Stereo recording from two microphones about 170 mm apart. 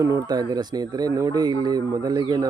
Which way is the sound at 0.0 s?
20° right (ahead or behind).